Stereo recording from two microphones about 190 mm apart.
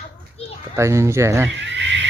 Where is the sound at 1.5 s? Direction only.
70° right (ahead or behind).